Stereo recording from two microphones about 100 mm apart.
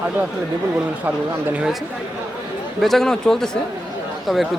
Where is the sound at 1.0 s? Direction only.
20° right (ahead or behind).